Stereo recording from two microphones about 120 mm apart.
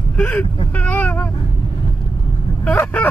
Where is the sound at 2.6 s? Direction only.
10° left (ahead or behind).